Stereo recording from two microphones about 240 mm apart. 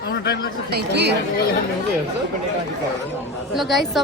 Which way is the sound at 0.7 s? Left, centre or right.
Right.